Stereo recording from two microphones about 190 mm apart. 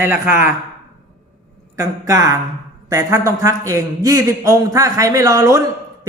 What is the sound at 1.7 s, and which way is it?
A man's voice, 15° right (ahead or behind).